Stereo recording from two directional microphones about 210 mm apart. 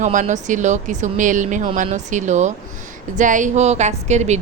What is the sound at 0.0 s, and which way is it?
A woman's voice, 35° right (ahead or behind).